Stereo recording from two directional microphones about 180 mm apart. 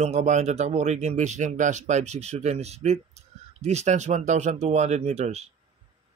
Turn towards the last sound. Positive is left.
turn(degrees=-35)  # may be behind; listen again after turning